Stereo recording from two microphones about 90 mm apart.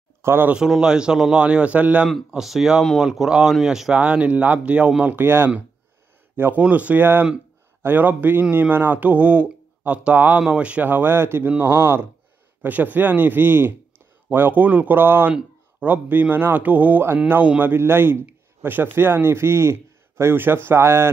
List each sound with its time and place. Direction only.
0.2 s speech: 25° right (ahead or behind)
0.5 s speech: 10° right (ahead or behind)
2.0 s a man's voice: centre (ahead or behind); by 21.1 s 25° right (ahead or behind)